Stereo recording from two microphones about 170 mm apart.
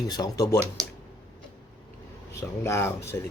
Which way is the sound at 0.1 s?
20° left (ahead or behind).